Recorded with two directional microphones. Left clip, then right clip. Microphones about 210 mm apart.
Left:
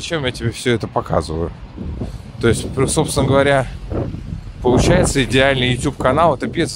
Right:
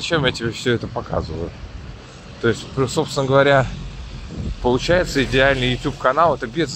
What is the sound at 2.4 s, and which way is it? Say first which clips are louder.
Speech: left 3 dB; 20° left (ahead or behind).